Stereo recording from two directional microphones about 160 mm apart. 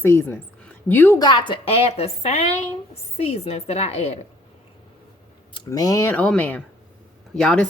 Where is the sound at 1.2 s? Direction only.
30° left (ahead or behind).